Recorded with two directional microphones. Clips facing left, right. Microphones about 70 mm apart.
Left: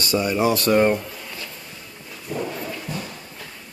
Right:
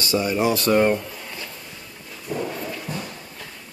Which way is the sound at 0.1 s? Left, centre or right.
Centre.